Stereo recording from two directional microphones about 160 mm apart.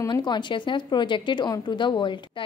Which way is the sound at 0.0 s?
25° left (ahead or behind).